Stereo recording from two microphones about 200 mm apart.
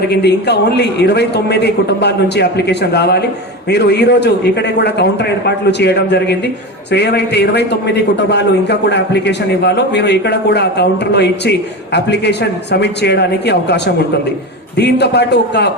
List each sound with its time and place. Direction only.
0.1 s a man's voice: 55° left (ahead or behind)